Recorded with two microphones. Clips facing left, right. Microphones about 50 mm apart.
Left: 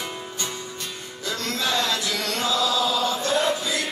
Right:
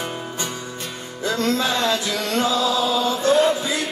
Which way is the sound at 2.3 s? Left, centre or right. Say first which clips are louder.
Right 4 dB; right.